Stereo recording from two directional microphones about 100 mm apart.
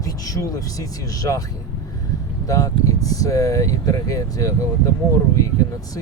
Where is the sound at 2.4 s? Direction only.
35° left (ahead or behind).